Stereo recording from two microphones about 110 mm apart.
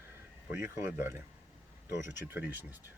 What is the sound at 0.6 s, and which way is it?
Speech, 20° right (ahead or behind).